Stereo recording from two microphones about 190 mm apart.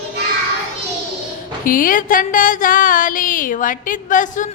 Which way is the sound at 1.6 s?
45° left (ahead or behind).